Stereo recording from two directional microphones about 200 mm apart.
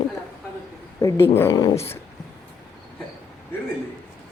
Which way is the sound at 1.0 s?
15° left (ahead or behind).